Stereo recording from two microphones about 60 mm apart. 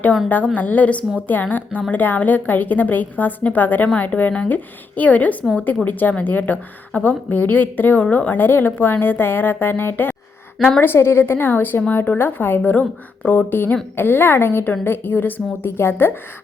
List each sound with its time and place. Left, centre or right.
0.5 s a woman's voice: left